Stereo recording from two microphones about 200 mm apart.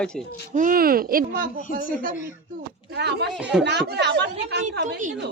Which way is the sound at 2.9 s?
55° right (ahead or behind).